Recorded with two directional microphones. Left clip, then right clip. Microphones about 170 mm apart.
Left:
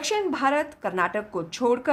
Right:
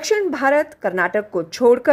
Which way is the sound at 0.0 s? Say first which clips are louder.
Right 6 dB; 20° right (ahead or behind).